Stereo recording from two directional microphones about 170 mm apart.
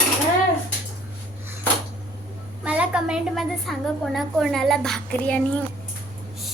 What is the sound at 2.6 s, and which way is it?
A woman's voice, 5° right (ahead or behind).